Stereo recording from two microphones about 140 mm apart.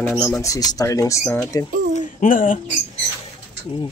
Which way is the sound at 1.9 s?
80° left.